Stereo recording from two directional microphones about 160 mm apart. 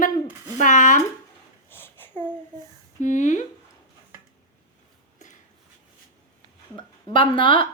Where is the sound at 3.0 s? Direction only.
50° left (ahead or behind).